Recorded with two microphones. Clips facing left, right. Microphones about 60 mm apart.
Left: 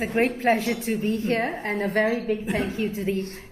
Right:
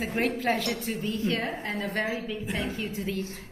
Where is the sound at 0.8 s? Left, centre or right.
Left.